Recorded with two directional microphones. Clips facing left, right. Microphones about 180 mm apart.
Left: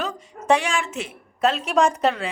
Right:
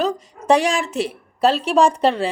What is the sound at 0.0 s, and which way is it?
A woman's voice, 35° right (ahead or behind).